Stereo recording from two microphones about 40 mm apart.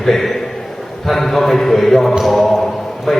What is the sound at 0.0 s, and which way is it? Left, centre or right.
A man's voice, centre.